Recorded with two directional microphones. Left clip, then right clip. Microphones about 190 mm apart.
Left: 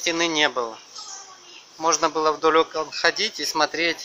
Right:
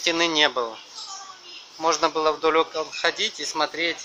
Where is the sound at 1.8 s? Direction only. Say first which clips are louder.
Left 1 dB; 5° left (ahead or behind).